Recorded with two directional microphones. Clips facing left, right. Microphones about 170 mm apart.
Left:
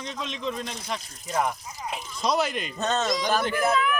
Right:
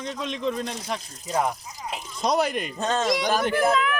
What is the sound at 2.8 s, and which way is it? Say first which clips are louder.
Speech: right 1 dB; 10° right (ahead or behind).